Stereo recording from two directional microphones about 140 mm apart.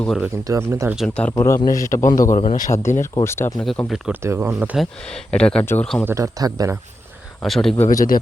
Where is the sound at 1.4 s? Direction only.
20° left (ahead or behind).